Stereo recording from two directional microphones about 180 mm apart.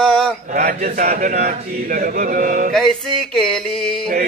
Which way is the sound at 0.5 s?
50° right (ahead or behind).